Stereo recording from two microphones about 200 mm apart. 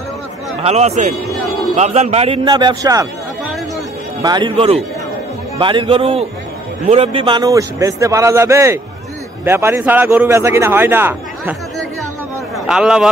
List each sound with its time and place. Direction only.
0.7 s a man's voice: 35° right (ahead or behind); by 3.1 s 15° right (ahead or behind)
4.2 s a man's voice: 20° right (ahead or behind)
12.5 s a man's voice: 5° right (ahead or behind)